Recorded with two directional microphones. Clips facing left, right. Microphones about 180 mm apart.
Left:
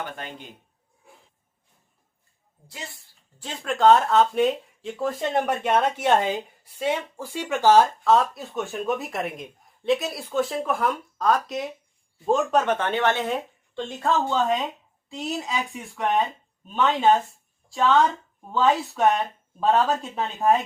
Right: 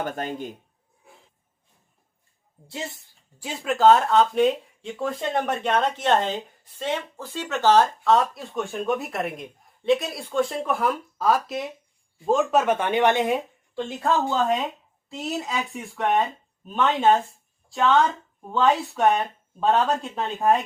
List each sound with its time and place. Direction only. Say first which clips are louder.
0.0 s a man's voice: right 6 dB; 40° right (ahead or behind)
2.6 s speech: right 6 dB; 25° right (ahead or behind)
3.3 s speech: right 2 dB; 10° right (ahead or behind)